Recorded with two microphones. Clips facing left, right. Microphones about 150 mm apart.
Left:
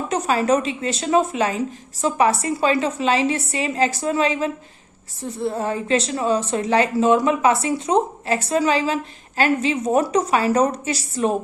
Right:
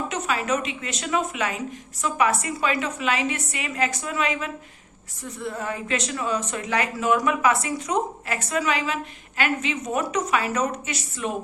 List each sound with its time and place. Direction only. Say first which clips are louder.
0.1 s speech: left 10 dB; 35° left (ahead or behind)